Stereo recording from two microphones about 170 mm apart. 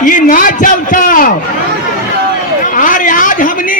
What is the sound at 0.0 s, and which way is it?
A man's voice, 50° left (ahead or behind).